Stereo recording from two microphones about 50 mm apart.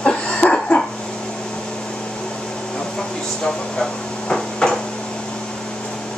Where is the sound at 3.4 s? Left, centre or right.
Centre.